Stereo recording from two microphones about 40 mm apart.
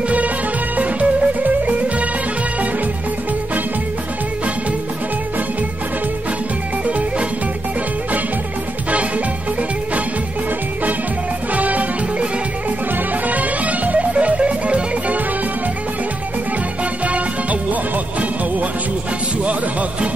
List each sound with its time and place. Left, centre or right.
0.7 s music: right
11.5 s music: right
13.3 s music: right
17.0 s music: right